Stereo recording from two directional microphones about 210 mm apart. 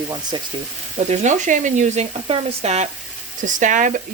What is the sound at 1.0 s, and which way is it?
Speech, 35° right (ahead or behind).